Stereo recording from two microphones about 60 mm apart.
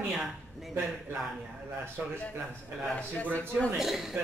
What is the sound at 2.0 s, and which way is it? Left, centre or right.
Speech, right.